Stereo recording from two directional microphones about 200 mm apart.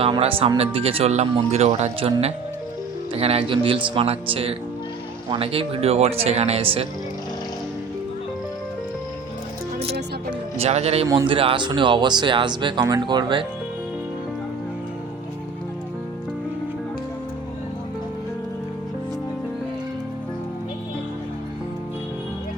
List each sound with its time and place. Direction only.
0.0 s speech: 30° right (ahead or behind)
10.6 s speech: 30° right (ahead or behind)
11.1 s speech: 20° right (ahead or behind)